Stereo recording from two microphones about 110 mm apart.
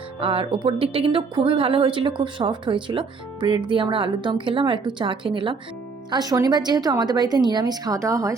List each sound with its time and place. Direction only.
0.2 s speech: 55° right (ahead or behind)
6.1 s a woman's voice: 40° right (ahead or behind)